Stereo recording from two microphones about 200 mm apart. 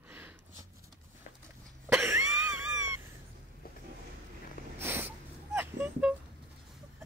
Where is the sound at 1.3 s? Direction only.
40° left (ahead or behind).